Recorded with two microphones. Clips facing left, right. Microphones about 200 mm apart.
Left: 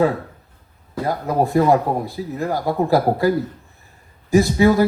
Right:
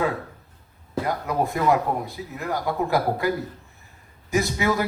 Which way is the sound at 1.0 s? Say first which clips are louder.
Left 6 dB; 35° left (ahead or behind).